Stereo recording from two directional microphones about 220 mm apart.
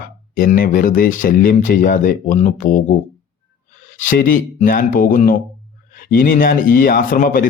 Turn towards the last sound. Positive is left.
turn(degrees=40)  # may be behind; listen again after turning